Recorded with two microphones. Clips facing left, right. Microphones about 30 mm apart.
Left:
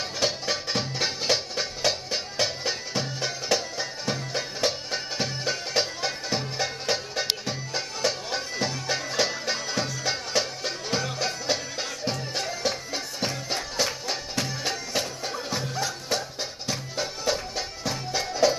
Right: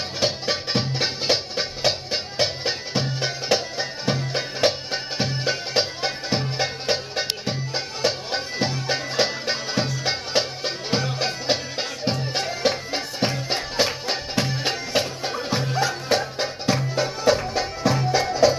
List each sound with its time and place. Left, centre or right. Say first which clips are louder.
0.2 s music: right 3 dB; right